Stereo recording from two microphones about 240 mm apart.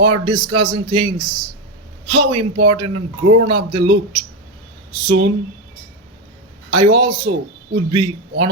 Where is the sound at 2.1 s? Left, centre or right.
Centre.